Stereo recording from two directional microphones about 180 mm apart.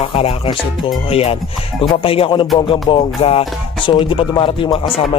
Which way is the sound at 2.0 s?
30° left (ahead or behind).